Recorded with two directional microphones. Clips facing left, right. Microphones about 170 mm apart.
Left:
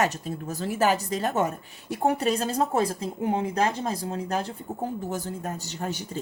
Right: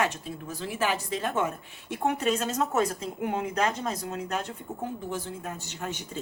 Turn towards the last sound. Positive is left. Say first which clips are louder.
# left 4 dB
turn(degrees=35)  # may be behind; listen again after turning